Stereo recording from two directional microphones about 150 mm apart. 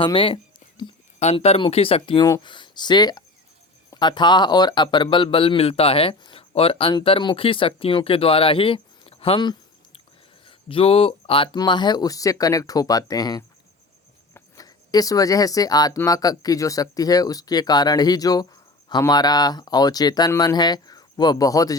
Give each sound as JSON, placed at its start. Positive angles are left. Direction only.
{"t": 0.0, "sound": "speech", "side_deg": 35}
{"t": 1.2, "sound": "speech", "side_deg": 45}